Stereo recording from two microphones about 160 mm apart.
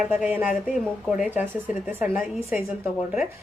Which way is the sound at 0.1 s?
10° right (ahead or behind).